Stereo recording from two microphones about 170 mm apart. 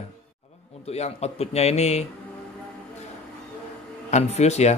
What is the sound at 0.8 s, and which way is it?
Speech, 40° left (ahead or behind).